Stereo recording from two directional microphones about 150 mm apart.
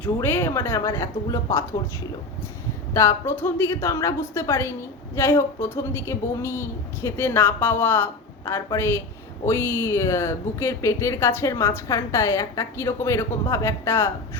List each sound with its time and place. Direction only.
0.0 s speech: 15° left (ahead or behind)
2.9 s speech: 20° left (ahead or behind)